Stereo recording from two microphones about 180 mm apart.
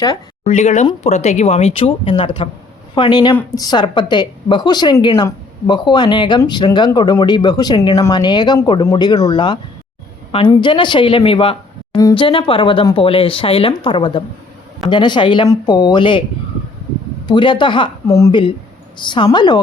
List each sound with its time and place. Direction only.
0.4 s a woman's voice: 40° left (ahead or behind)
17.2 s a woman's voice: 25° left (ahead or behind)